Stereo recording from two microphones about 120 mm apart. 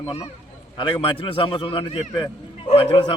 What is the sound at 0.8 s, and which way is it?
A man's voice, 45° left (ahead or behind).